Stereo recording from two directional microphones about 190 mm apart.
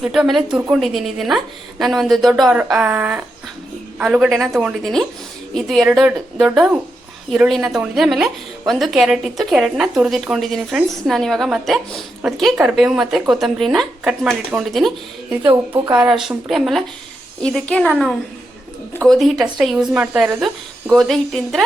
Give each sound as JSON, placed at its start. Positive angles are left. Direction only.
{"t": 0.0, "sound": "a woman's voice", "side_deg": 0}